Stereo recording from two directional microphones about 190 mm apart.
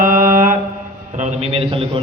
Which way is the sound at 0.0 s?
45° right (ahead or behind).